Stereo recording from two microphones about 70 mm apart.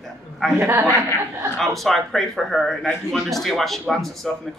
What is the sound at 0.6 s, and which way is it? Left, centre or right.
Speech, right.